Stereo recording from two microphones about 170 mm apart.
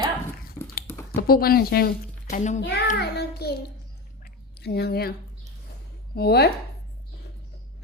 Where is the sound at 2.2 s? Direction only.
45° left (ahead or behind).